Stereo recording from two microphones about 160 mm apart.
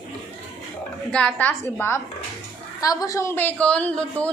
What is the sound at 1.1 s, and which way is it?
Speech, 5° left (ahead or behind).